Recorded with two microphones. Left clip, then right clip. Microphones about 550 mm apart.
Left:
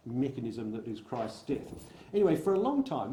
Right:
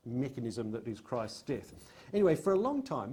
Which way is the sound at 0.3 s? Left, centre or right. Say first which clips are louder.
Left 1 dB; right.